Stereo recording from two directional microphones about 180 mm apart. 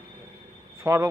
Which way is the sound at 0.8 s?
15° right (ahead or behind).